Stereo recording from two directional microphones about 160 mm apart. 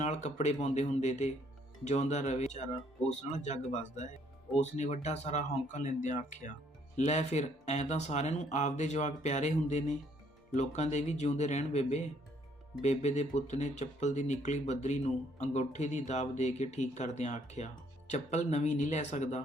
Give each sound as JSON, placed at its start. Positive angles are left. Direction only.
{"t": 0.0, "sound": "speech", "side_deg": 45}